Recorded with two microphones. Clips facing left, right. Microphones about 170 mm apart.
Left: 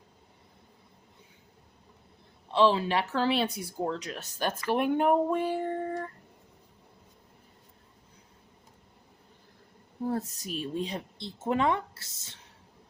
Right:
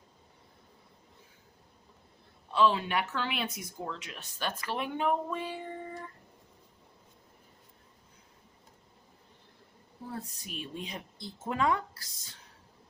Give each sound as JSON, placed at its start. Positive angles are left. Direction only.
{"t": 2.5, "sound": "speech", "side_deg": 30}
{"t": 10.1, "sound": "a woman's voice", "side_deg": 40}